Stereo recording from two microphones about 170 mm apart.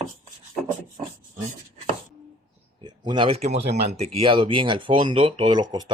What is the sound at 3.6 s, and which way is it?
Speech, 75° right (ahead or behind).